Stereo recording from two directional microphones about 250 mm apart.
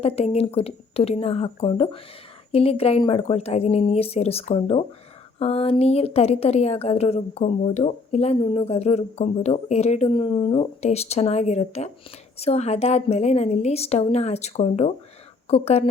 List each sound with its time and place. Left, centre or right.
0.0 s a woman's voice: left